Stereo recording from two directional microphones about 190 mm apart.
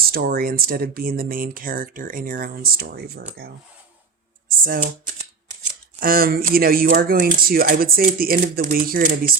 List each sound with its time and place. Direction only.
0.0 s speech: 50° right (ahead or behind)
4.4 s speech: 45° right (ahead or behind)
6.0 s speech: 50° right (ahead or behind)